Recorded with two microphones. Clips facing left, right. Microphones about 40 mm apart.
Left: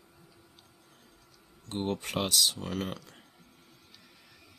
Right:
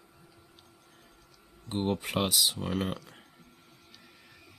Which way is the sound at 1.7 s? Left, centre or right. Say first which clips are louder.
Right 2 dB; centre.